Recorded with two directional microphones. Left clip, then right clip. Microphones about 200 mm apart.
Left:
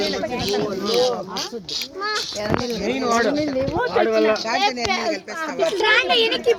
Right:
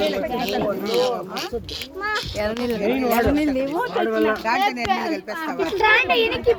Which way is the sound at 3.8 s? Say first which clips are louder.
Left 5 dB; 30° right (ahead or behind).